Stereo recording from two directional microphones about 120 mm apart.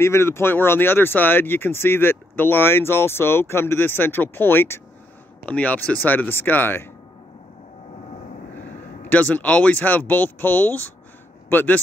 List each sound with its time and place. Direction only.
0.0 s speech: 20° left (ahead or behind)
9.0 s a man's voice: 10° left (ahead or behind)